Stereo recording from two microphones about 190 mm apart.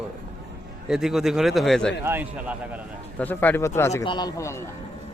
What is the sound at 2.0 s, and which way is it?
Speech, 10° right (ahead or behind).